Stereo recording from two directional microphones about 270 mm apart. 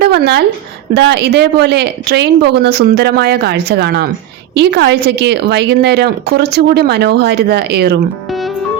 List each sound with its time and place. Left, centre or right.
0.0 s a woman's voice: right
8.3 s music: centre